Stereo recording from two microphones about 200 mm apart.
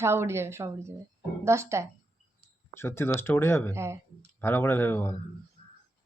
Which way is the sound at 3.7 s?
15° right (ahead or behind).